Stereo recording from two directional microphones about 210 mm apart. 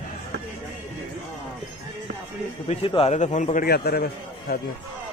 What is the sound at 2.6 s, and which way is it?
A man's voice, 25° left (ahead or behind).